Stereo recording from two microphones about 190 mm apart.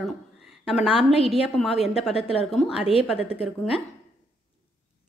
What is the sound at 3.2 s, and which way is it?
Speech, 30° left (ahead or behind).